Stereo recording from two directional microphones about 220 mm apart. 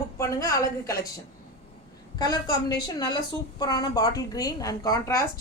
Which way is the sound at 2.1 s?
15° left (ahead or behind).